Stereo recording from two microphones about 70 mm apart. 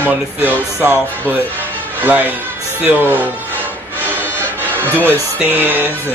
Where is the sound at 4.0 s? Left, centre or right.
Right.